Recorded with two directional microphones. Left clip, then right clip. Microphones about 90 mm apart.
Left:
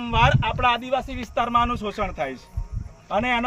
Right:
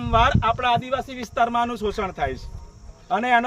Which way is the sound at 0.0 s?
20° right (ahead or behind).